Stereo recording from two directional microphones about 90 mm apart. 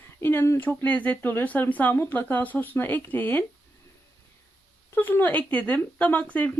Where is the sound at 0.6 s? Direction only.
20° left (ahead or behind).